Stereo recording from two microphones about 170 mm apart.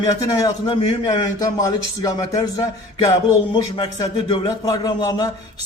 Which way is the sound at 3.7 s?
30° left (ahead or behind).